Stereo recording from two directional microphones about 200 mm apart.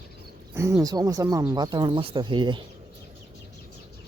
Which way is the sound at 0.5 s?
15° right (ahead or behind).